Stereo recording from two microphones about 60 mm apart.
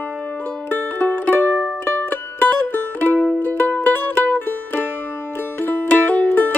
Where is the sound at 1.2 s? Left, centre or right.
Left.